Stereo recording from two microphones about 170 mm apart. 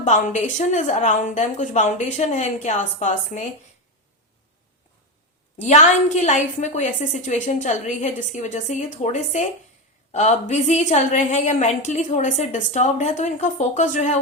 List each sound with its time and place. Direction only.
0.0 s a woman's voice: 45° left (ahead or behind)
5.5 s a woman's voice: 45° left (ahead or behind)